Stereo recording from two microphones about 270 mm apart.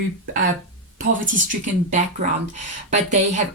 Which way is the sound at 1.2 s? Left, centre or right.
Right.